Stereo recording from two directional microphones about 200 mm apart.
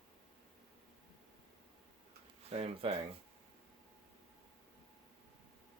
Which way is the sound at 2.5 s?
30° right (ahead or behind).